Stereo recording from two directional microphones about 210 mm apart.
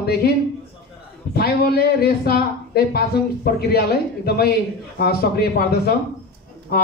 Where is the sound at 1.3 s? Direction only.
50° left (ahead or behind).